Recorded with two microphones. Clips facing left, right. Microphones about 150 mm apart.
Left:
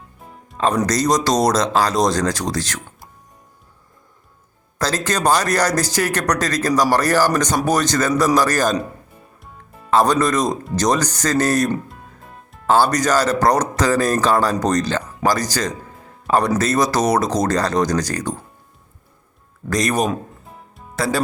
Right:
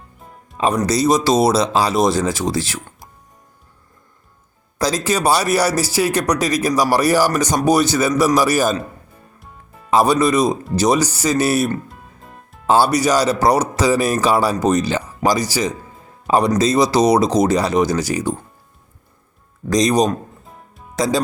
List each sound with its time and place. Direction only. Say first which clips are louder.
0.5 s speech: right 1 dB; 10° right (ahead or behind)
4.8 s speech: right 2 dB; 10° right (ahead or behind)
9.9 s speech: right 2 dB; 10° right (ahead or behind)
11.9 s music: even; centre (ahead or behind)
12.6 s speech: right 1 dB; 15° right (ahead or behind)
19.7 s speech: right 4 dB; 15° right (ahead or behind)